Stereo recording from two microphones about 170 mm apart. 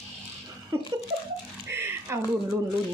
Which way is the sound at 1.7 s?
15° right (ahead or behind).